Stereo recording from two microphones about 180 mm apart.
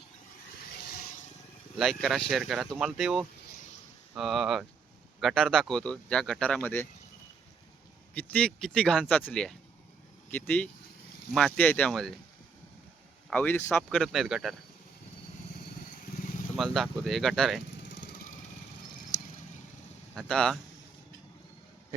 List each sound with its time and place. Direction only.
1.8 s speech: centre (ahead or behind)
8.1 s speech: 5° left (ahead or behind)
13.3 s speech: 10° left (ahead or behind)
13.9 s speech: centre (ahead or behind)
16.6 s speech: centre (ahead or behind)
17.7 s vehicle: 80° left
20.1 s speech: 5° left (ahead or behind)